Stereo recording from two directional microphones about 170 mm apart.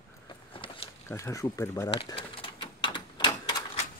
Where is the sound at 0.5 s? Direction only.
30° left (ahead or behind).